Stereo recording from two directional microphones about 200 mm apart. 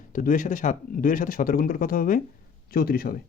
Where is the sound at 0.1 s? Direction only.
40° left (ahead or behind).